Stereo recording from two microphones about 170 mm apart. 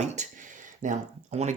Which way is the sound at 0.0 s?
45° right (ahead or behind).